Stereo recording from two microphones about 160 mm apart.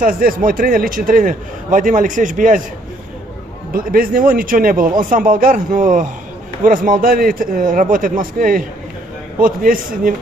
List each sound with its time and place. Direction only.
0.0 s a man's voice: 60° right (ahead or behind)
3.7 s a man's voice: 65° right (ahead or behind)